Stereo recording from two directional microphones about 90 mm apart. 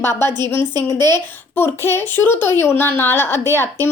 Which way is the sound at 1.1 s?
25° left (ahead or behind).